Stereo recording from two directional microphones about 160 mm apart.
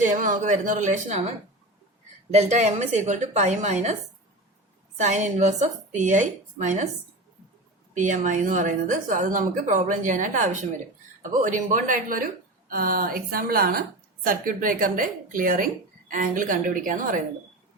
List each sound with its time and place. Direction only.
0.0 s a woman's voice: 55° right (ahead or behind)
2.3 s a woman's voice: 45° right (ahead or behind)
4.9 s a woman's voice: 50° right (ahead or behind)
7.9 s a woman's voice: 50° right (ahead or behind)